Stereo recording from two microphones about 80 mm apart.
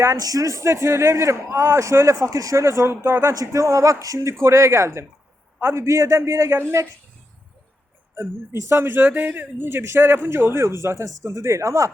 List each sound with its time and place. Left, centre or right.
0.0 s a man's voice: right
3.3 s a man's voice: right
8.1 s a man's voice: right